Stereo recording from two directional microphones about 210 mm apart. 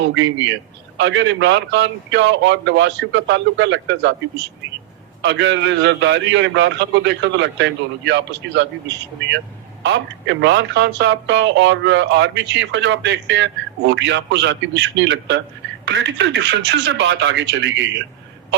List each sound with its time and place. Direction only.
0.9 s speech: 60° right (ahead or behind)
9.8 s speech: 60° right (ahead or behind)